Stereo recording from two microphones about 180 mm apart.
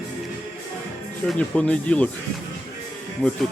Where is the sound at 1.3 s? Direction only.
5° left (ahead or behind).